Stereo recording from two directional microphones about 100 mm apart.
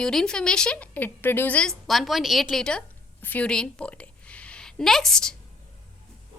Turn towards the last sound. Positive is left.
turn(degrees=5)  # may be behind; listen again after turning